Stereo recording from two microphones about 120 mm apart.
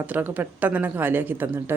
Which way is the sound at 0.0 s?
15° right (ahead or behind).